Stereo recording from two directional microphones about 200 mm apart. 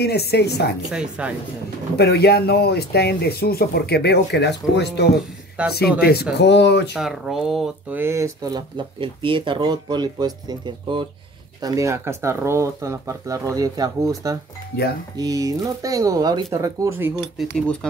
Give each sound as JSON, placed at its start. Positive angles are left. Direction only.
{"t": 0.0, "sound": "speech", "side_deg": 55}
{"t": 0.8, "sound": "speech", "side_deg": -5}
{"t": 2.0, "sound": "speech", "side_deg": 55}
{"t": 7.0, "sound": "speech", "side_deg": 0}
{"t": 17.4, "sound": "speech", "side_deg": 0}